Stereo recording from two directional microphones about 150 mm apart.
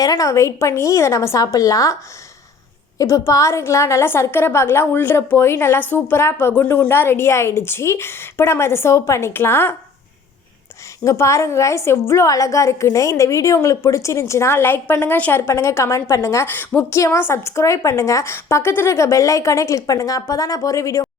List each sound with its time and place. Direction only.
0.0 s a woman's voice: 25° left (ahead or behind)
3.0 s a woman's voice: 20° left (ahead or behind)
11.0 s a woman's voice: 20° left (ahead or behind)